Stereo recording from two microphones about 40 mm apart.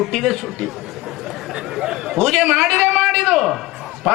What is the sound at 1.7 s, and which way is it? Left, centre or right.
Chatter, centre.